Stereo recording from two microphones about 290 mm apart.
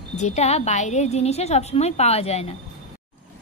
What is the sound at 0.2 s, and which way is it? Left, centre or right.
A woman's voice, left.